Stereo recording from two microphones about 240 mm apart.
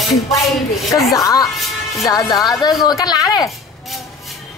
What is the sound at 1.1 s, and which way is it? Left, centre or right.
A woman's voice, centre.